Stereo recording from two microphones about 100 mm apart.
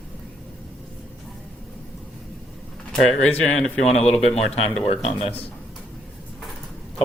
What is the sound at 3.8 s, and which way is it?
Speech, 90° left.